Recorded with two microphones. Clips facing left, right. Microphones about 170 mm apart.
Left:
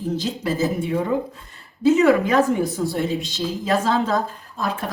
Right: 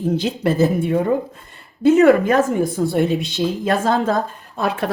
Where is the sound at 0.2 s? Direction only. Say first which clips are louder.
Right 6 dB; 60° right (ahead or behind).